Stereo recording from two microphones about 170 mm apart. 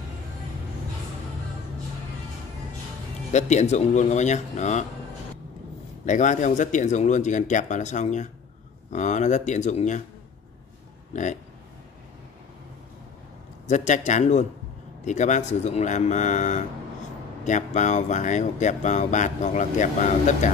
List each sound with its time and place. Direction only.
3.3 s speech: 40° left (ahead or behind)
6.0 s speech: 45° left (ahead or behind)
13.7 s speech: 45° left (ahead or behind)